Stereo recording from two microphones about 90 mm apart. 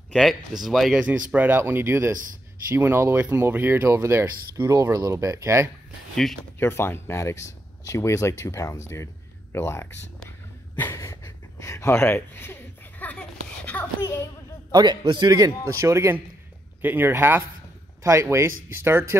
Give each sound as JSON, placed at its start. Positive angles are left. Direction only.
{"t": 0.1, "sound": "speech", "side_deg": 0}
{"t": 1.0, "sound": "speech", "side_deg": -20}
{"t": 6.6, "sound": "speech", "side_deg": 25}
{"t": 11.0, "sound": "a sound", "side_deg": 40}
{"t": 14.0, "sound": "speech", "side_deg": 35}
{"t": 14.7, "sound": "a man's voice", "side_deg": -55}